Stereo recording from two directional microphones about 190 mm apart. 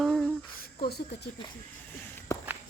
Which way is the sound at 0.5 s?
50° left (ahead or behind).